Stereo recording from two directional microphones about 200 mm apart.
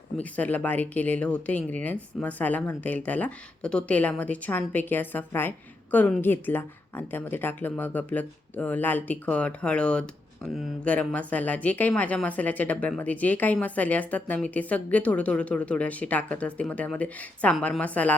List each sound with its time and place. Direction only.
0.2 s speech: 5° left (ahead or behind)